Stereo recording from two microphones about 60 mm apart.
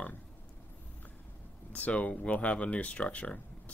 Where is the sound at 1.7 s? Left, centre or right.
Left.